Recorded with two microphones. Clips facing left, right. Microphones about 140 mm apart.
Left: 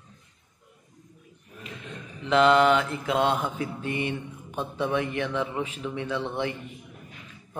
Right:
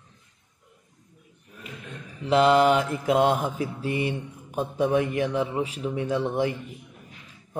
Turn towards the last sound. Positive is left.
turn(degrees=-40)  # may be behind; listen again after turning